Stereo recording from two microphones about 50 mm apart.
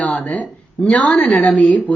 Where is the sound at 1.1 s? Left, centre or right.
Centre.